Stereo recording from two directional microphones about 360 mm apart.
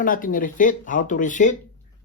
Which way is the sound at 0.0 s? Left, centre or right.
Left.